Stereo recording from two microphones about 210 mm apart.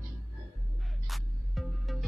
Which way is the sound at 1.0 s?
Centre (ahead or behind).